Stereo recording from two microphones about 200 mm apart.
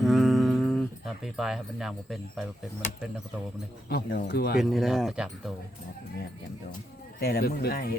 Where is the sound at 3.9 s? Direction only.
50° left (ahead or behind).